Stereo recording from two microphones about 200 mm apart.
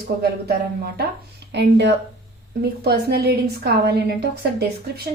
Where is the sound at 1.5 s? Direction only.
60° right (ahead or behind).